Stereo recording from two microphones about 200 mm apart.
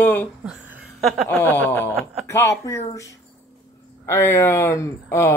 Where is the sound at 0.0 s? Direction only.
10° left (ahead or behind).